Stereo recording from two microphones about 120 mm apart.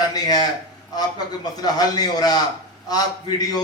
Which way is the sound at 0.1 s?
35° left (ahead or behind).